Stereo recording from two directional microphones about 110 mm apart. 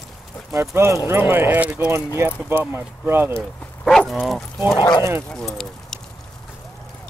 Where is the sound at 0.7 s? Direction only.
25° right (ahead or behind).